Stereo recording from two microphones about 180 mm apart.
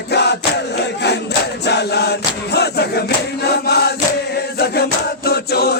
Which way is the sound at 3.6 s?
65° left (ahead or behind).